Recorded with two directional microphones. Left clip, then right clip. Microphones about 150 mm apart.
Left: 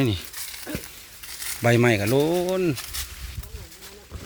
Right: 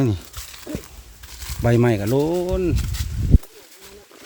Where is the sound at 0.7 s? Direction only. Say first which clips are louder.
Right 3 dB; 55° left (ahead or behind).